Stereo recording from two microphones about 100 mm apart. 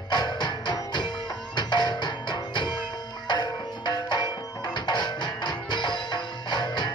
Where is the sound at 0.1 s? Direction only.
45° left (ahead or behind).